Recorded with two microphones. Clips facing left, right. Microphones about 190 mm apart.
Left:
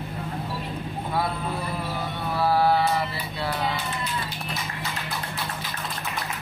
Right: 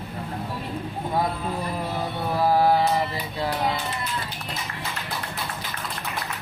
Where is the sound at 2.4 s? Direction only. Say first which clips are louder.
Right 2 dB; 15° right (ahead or behind).